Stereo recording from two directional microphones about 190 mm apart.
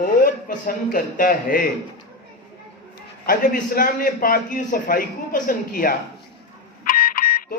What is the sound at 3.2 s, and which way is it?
A man's voice, 50° left (ahead or behind).